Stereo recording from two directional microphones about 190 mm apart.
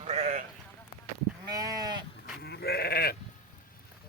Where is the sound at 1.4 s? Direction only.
20° right (ahead or behind).